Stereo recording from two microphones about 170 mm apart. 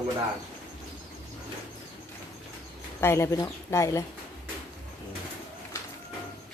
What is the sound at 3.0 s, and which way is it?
Speech, 15° left (ahead or behind).